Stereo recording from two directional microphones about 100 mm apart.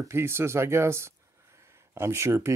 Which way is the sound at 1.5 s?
30° right (ahead or behind).